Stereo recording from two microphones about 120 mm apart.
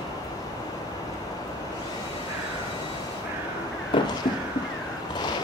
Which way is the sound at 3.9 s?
45° left (ahead or behind).